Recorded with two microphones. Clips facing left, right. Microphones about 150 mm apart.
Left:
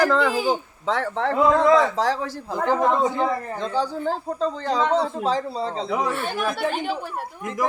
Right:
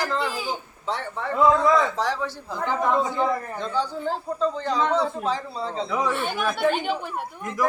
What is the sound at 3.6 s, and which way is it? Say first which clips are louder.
Speech: left 4 dB; 40° left (ahead or behind).